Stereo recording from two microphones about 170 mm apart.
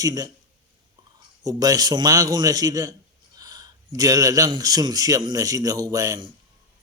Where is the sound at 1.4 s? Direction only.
20° right (ahead or behind).